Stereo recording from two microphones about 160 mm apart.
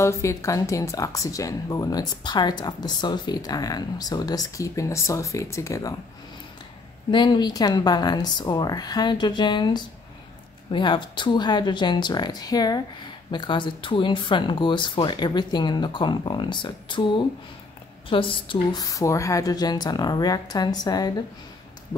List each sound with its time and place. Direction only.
0.0 s speech: 15° left (ahead or behind)
7.1 s speech: 30° left (ahead or behind)
18.1 s speech: 35° left (ahead or behind)